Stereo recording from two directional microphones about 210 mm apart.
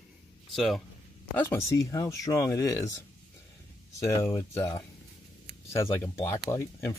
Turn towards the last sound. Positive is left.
turn(degrees=10)  # may be behind; listen again after turning